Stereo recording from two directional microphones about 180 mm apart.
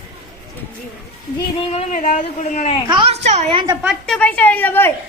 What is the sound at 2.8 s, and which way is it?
Speech, 25° right (ahead or behind).